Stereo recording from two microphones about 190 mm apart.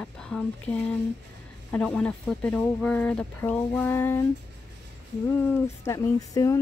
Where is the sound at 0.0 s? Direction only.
5° left (ahead or behind).